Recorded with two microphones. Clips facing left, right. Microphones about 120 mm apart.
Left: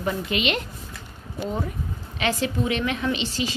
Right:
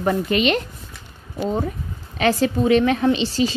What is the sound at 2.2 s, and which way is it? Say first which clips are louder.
A woman's voice: right 6 dB; 35° right (ahead or behind).